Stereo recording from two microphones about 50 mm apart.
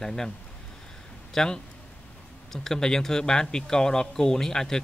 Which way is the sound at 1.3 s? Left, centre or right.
Centre.